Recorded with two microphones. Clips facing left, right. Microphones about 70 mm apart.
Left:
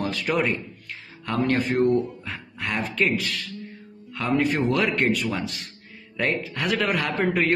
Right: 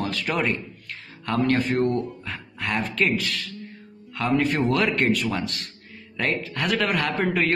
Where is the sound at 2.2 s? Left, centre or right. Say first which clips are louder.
Right 1 dB; centre.